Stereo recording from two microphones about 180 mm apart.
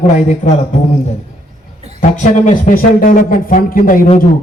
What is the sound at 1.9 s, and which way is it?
Speech, 45° left (ahead or behind).